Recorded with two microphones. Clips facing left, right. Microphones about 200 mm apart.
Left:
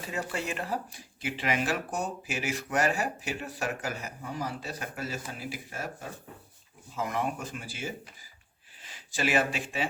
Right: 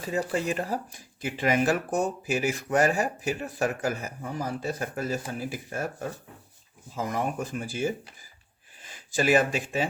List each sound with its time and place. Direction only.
0.1 s speech: 35° right (ahead or behind)
6.9 s speech: 35° right (ahead or behind)